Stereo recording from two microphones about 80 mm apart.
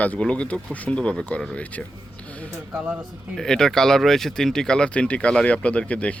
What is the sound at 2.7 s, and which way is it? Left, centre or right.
Speech, centre.